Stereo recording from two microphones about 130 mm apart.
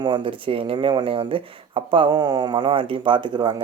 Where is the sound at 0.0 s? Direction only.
40° right (ahead or behind).